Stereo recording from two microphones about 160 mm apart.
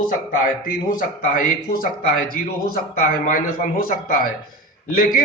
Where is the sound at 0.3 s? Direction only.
60° left (ahead or behind).